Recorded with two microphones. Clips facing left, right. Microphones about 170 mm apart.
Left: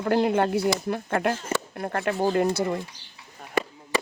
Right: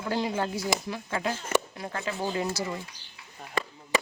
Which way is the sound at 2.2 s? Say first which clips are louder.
Left 8 dB; 45° left (ahead or behind).